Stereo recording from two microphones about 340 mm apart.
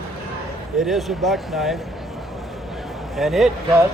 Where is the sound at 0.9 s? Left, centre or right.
Centre.